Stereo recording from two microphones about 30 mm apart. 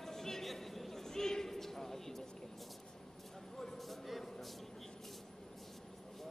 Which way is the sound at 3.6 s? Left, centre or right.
Centre.